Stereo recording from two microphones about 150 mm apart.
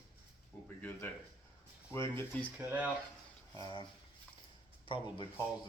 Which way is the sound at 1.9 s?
15° left (ahead or behind).